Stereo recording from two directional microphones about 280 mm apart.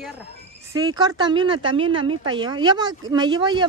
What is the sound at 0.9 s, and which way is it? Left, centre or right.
A woman's voice, centre.